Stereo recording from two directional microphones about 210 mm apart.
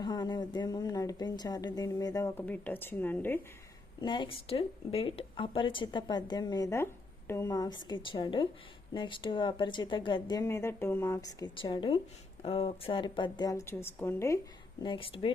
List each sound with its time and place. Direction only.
0.0 s a woman's voice: 20° left (ahead or behind)
4.0 s a woman's voice: 25° left (ahead or behind)
14.8 s speech: 25° left (ahead or behind)